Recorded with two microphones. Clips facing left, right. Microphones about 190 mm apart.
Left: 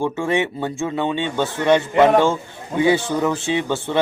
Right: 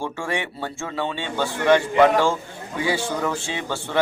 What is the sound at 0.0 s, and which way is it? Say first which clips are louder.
Speech: left 7 dB; 20° left (ahead or behind).